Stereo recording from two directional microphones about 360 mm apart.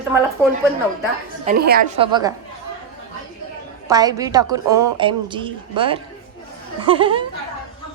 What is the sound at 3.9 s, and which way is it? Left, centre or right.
A woman's voice, centre.